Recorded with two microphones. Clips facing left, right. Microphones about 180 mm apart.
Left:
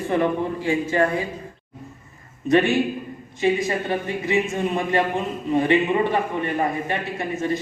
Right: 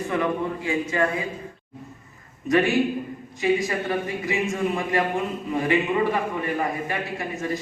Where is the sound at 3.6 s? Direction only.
25° left (ahead or behind).